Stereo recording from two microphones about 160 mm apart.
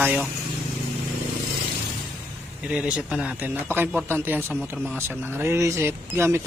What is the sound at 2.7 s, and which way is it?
Speech, 5° right (ahead or behind).